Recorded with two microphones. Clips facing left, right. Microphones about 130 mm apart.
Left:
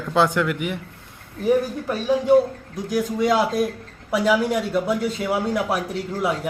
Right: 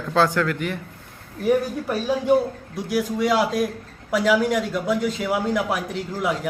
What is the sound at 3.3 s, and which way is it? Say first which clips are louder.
Speech: left 1 dB; centre (ahead or behind).